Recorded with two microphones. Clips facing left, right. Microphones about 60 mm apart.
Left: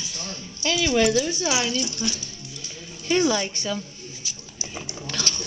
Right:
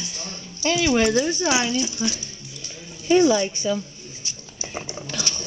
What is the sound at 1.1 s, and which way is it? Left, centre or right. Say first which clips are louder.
Speech: right 2 dB; right.